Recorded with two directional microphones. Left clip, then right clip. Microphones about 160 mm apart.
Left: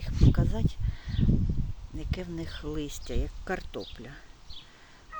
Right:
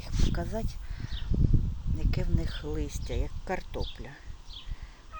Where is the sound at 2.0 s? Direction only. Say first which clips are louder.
Even; 5° left (ahead or behind).